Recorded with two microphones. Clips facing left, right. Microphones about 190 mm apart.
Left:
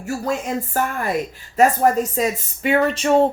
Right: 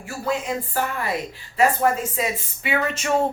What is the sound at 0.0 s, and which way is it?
A woman's voice, 45° left (ahead or behind).